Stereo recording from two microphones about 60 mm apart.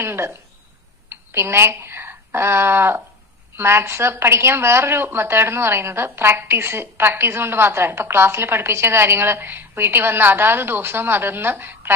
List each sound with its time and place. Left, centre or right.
0.0 s speech: right